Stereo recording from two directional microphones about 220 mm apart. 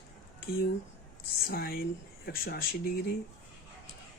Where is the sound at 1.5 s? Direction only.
45° left (ahead or behind).